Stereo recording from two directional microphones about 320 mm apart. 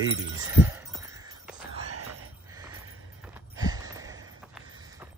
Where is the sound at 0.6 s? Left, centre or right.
Centre.